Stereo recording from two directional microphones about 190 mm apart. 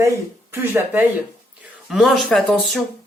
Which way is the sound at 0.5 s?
10° right (ahead or behind).